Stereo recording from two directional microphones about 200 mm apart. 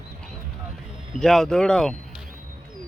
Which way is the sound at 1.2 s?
Centre (ahead or behind).